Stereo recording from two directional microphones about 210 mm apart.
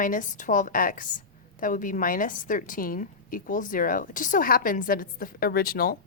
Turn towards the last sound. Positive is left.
turn(degrees=45)  # may be behind; listen again after turning